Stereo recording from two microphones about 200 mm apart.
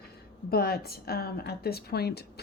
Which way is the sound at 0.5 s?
50° left (ahead or behind).